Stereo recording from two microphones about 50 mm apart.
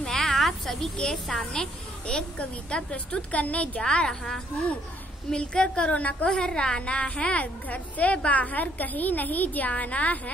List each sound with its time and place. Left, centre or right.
0.0 s a sound: centre
1.0 s a woman's voice: centre; by 3.8 s left
3.8 s a woman's voice: centre